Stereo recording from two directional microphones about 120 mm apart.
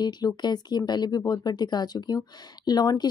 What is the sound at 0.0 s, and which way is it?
Speech, 35° left (ahead or behind).